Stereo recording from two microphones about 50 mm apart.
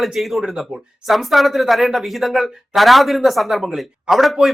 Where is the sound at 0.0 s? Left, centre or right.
Centre.